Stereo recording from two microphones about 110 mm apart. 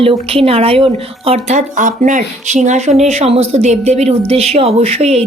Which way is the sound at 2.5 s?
90° right.